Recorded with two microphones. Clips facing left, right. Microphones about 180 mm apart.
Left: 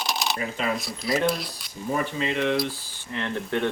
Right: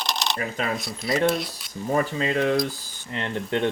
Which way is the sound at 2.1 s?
40° right (ahead or behind).